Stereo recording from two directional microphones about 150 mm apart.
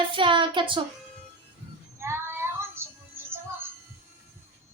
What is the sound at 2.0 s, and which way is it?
Child singing, 15° right (ahead or behind).